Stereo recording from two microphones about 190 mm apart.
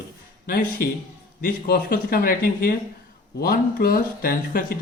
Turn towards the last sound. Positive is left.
turn(degrees=50)  # may be behind; listen again after turning